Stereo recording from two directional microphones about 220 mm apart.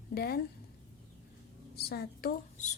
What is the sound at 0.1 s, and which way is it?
Speech, 45° left (ahead or behind).